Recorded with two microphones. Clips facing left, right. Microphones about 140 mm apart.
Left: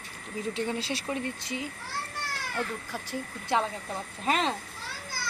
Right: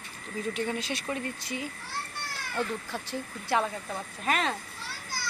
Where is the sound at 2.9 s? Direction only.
15° left (ahead or behind).